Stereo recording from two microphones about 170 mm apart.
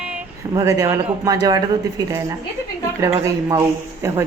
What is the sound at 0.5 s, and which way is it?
A woman's voice, 20° right (ahead or behind).